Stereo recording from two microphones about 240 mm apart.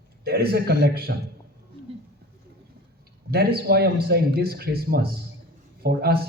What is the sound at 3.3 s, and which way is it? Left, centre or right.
A man's voice, right.